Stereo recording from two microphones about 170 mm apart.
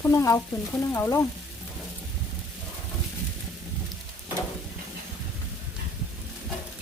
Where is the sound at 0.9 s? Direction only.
15° left (ahead or behind).